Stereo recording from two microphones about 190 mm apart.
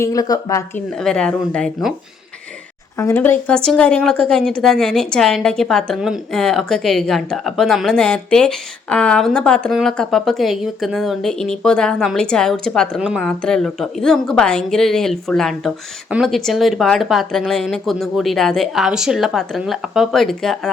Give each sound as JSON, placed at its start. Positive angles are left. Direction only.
{"t": 0.0, "sound": "speech", "side_deg": 20}
{"t": 1.0, "sound": "speech", "side_deg": 5}
{"t": 3.0, "sound": "speech", "side_deg": 10}